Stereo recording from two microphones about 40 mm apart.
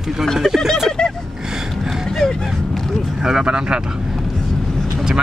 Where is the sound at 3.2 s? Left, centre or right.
Centre.